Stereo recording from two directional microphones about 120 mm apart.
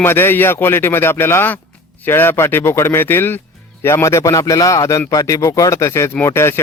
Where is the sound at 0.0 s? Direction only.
20° left (ahead or behind).